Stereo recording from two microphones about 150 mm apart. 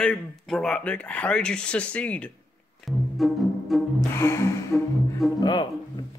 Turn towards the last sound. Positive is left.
turn(degrees=30)  # may be behind; listen again after turning